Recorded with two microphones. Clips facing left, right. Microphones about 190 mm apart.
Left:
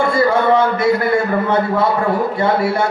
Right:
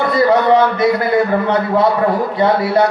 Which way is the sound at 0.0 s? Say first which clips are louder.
Right 2 dB; 25° left (ahead or behind).